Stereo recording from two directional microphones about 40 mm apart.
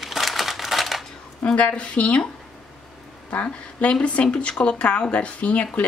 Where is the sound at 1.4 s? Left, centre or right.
Left.